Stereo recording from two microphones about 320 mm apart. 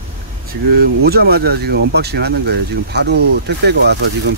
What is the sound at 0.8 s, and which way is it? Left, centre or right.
Speech, right.